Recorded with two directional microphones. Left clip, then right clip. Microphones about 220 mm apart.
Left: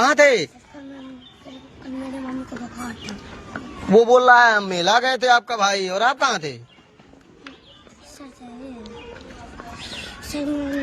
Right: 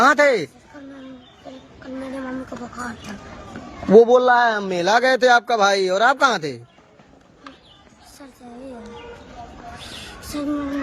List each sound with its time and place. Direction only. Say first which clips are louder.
0.0 s speech: even; 25° right (ahead or behind)
3.8 s speech: right 1 dB; 25° right (ahead or behind)
10.3 s speech: even; centre (ahead or behind)